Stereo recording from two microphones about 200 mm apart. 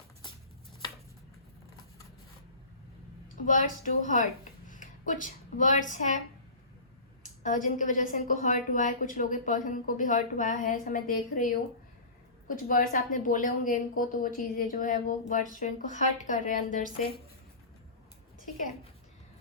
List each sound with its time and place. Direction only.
3.4 s a woman's voice: 40° left (ahead or behind)
7.4 s a woman's voice: 40° left (ahead or behind)